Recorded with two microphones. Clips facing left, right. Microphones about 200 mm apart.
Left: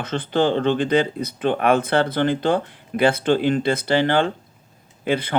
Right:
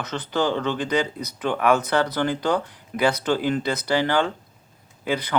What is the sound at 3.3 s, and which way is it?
Speech, 25° left (ahead or behind).